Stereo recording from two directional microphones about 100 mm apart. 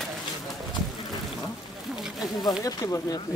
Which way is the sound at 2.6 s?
35° left (ahead or behind).